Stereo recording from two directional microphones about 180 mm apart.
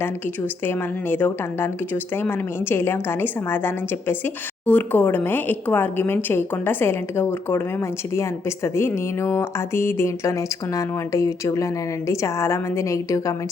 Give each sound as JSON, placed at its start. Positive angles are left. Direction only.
{"t": 0.6, "sound": "a woman's voice", "side_deg": 10}